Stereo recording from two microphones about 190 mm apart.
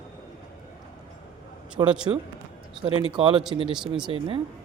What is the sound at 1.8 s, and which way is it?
Speech, 20° right (ahead or behind).